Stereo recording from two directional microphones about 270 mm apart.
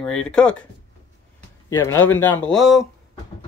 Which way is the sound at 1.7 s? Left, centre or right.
Centre.